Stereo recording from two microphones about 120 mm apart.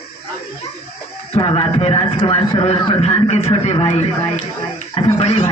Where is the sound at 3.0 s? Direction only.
60° left (ahead or behind).